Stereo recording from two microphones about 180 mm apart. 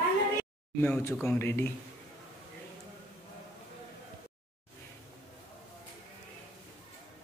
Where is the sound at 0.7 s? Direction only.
10° left (ahead or behind).